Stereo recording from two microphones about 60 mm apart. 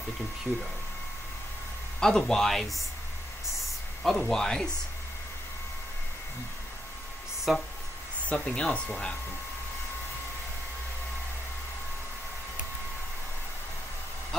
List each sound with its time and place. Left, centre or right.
2.0 s speech: centre
4.0 s speech: centre
7.5 s speech: centre
8.3 s speech: centre